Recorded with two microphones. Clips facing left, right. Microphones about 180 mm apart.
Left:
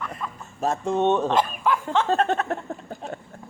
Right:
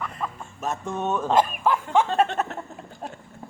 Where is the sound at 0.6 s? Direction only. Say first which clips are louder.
Left 6 dB; 30° left (ahead or behind).